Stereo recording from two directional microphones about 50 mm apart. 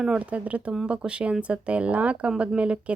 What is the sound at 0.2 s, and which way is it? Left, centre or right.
Speech, right.